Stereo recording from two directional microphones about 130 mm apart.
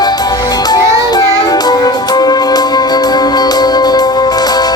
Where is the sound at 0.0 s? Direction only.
30° left (ahead or behind).